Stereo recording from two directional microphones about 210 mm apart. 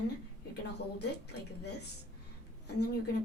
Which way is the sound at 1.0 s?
50° left (ahead or behind).